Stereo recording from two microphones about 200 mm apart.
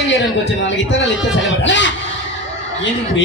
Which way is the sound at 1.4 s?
65° left (ahead or behind).